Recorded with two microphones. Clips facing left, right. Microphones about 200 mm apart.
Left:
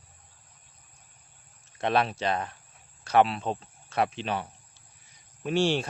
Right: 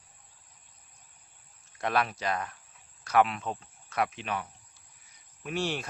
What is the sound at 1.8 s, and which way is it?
Speech, 25° left (ahead or behind).